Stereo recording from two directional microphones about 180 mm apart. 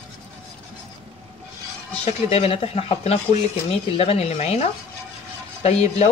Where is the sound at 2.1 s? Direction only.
35° left (ahead or behind).